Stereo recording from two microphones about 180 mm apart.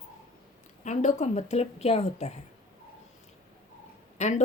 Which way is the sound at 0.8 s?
40° left (ahead or behind).